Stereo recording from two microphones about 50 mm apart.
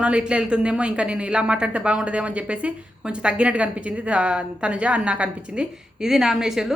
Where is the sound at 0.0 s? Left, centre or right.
Right.